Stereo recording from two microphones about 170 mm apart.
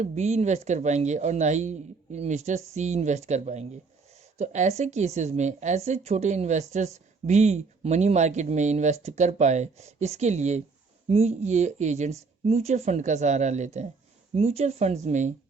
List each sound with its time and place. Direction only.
0.0 s a woman's voice: 40° right (ahead or behind)